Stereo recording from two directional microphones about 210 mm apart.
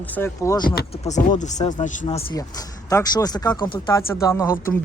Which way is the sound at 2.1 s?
20° left (ahead or behind).